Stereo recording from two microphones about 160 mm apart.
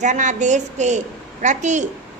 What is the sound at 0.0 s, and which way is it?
A woman's voice, 50° right (ahead or behind).